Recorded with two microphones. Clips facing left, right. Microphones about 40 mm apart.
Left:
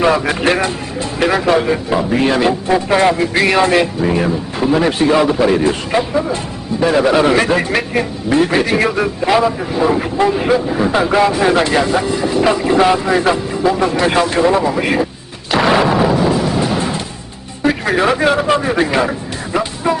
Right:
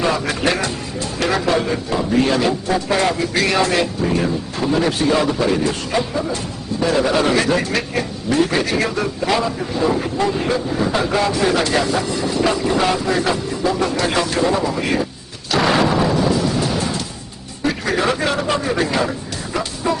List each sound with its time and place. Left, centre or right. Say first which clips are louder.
0.0 s speech: left 5 dB; left
15.5 s music: left 3 dB; centre
17.6 s speech: left 5 dB; left